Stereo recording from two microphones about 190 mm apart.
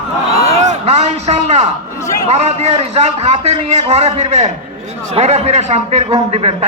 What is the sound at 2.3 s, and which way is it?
A man's voice, 35° right (ahead or behind).